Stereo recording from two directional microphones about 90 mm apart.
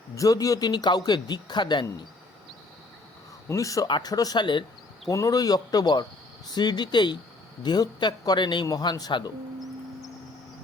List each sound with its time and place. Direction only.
0.2 s speech: 40° left (ahead or behind)
3.5 s a man's voice: 40° left (ahead or behind)
3.8 s speech: 60° left (ahead or behind)
4.1 s speech: 45° left (ahead or behind)
5.0 s speech: 40° left (ahead or behind); by 8.6 s 60° left (ahead or behind)
8.6 s speech: 50° left (ahead or behind)